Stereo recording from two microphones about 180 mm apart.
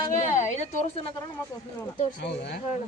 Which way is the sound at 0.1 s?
40° left (ahead or behind).